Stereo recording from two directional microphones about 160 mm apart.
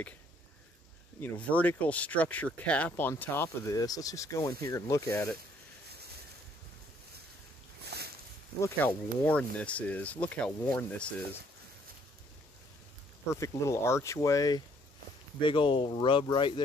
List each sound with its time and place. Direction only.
1.2 s speech: 10° left (ahead or behind)
7.9 s a sound: 90° right
8.5 s speech: 15° left (ahead or behind)
13.3 s speech: 20° left (ahead or behind)
15.4 s speech: 30° left (ahead or behind)